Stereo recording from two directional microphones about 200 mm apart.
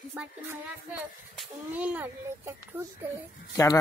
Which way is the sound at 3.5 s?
15° left (ahead or behind).